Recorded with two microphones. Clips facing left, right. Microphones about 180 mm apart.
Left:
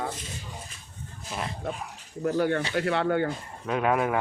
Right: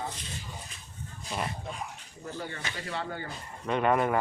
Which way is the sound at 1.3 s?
5° left (ahead or behind).